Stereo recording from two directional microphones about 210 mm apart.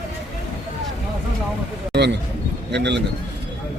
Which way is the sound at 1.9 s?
55° right (ahead or behind).